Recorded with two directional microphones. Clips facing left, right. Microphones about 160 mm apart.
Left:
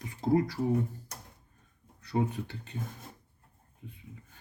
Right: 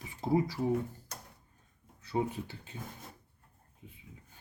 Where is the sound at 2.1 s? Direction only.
5° right (ahead or behind).